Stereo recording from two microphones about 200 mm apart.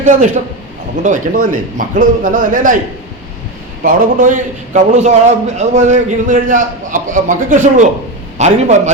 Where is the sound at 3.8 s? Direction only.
40° right (ahead or behind).